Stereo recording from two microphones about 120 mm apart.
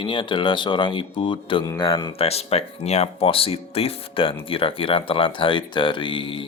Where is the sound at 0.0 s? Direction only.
45° left (ahead or behind).